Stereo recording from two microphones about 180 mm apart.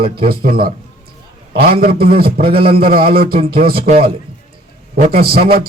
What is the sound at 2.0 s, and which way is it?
Speech, 55° right (ahead or behind).